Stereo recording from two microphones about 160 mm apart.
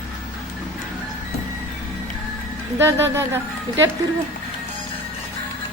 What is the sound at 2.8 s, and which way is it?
Speech, 15° right (ahead or behind).